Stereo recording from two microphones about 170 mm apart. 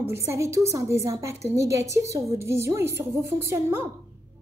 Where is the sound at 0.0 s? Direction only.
15° right (ahead or behind).